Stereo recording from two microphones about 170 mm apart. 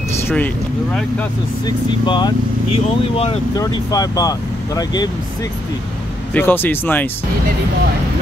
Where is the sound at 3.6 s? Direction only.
20° left (ahead or behind).